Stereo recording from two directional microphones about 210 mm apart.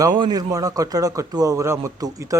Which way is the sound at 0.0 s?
20° right (ahead or behind).